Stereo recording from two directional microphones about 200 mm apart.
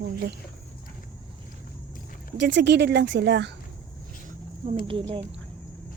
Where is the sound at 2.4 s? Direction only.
60° right (ahead or behind).